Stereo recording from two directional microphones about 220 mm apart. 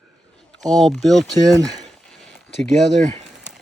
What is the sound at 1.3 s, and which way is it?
Speech, 15° right (ahead or behind).